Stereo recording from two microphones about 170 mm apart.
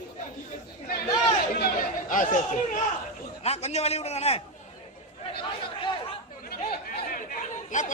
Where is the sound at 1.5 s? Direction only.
60° left (ahead or behind).